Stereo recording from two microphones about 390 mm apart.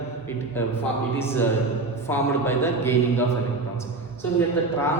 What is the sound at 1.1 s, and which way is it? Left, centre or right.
A man's voice, centre.